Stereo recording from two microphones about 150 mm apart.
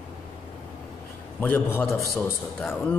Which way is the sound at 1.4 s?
10° left (ahead or behind).